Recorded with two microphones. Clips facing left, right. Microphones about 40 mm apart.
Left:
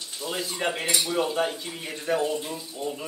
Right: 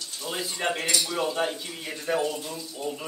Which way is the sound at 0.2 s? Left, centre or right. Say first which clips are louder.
Left 1 dB; centre.